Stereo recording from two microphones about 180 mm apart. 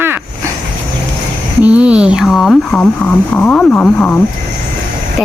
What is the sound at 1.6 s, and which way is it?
Speech, 5° right (ahead or behind).